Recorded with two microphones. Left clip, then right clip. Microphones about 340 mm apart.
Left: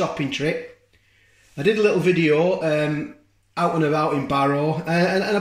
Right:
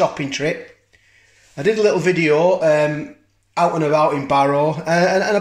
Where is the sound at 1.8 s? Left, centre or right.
Centre.